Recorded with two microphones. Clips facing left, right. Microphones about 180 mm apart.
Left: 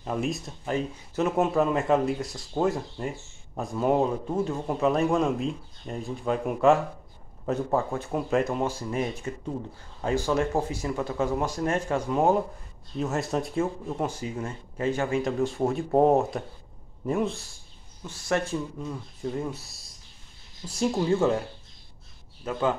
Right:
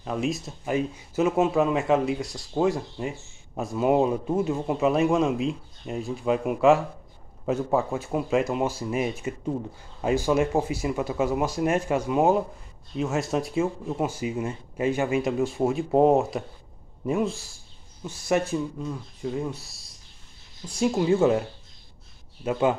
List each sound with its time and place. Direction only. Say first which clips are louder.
0.0 s speech: right 1 dB; centre (ahead or behind)
18.9 s speech: right 1 dB; centre (ahead or behind)
20.6 s speech: right 2 dB; 5° right (ahead or behind)
22.4 s speech: right 3 dB; 15° right (ahead or behind)